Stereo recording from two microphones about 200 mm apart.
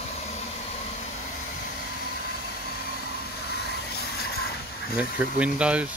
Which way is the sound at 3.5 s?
55° left (ahead or behind).